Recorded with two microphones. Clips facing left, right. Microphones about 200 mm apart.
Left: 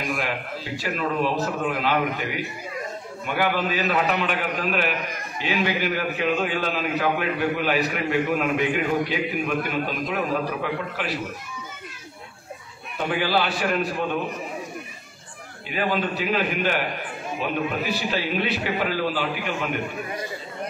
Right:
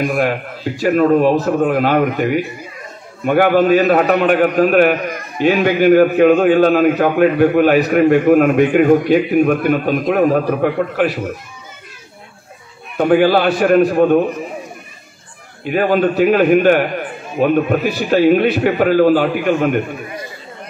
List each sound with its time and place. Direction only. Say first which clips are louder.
0.0 s a man's voice: right 11 dB; 50° right (ahead or behind)
12.9 s a man's voice: right 12 dB; 50° right (ahead or behind)
15.6 s a man's voice: right 11 dB; 50° right (ahead or behind)